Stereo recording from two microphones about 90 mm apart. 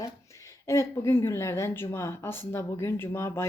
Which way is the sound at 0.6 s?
30° left (ahead or behind).